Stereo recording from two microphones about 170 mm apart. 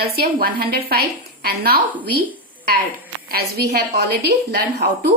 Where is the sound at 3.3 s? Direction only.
65° right (ahead or behind).